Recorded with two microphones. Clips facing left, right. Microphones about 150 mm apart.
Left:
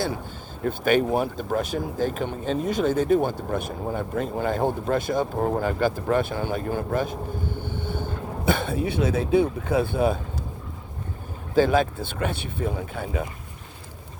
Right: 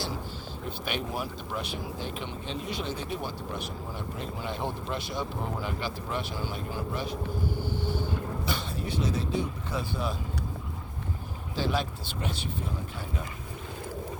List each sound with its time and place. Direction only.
0.6 s speech: 50° left (ahead or behind)
7.6 s vehicle: 55° left (ahead or behind)
8.9 s speech: 60° left (ahead or behind)
11.5 s speech: 50° left (ahead or behind)